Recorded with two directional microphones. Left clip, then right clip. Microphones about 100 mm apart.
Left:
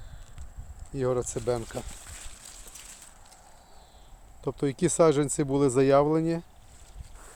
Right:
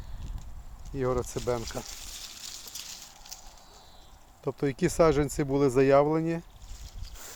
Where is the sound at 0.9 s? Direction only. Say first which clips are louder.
Left 1 dB; 35° left (ahead or behind).